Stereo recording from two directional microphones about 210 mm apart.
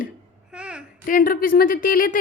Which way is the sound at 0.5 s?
5° right (ahead or behind).